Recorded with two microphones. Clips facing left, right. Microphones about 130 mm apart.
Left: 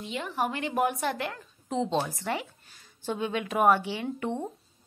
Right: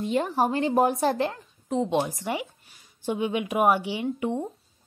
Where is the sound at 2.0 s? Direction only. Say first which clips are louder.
Right 3 dB; 15° right (ahead or behind).